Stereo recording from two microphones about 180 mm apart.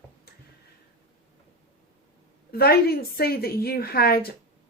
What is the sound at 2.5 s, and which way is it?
A woman's voice, 60° left (ahead or behind).